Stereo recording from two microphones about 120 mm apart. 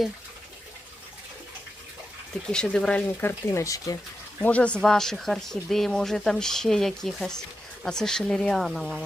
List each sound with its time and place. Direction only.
2.5 s speech: 5° left (ahead or behind); by 3.9 s 25° left (ahead or behind)
4.4 s speech: 10° left (ahead or behind)